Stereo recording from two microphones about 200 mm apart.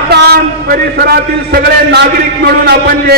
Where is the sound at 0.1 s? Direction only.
50° right (ahead or behind).